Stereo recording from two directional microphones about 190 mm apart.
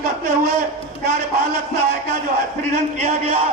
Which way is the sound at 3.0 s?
35° right (ahead or behind).